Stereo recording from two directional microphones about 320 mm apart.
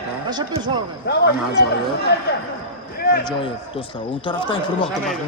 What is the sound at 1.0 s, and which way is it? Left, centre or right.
Speech, left.